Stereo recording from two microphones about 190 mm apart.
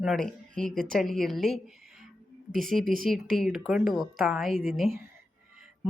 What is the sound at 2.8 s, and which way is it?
Speech, 50° right (ahead or behind).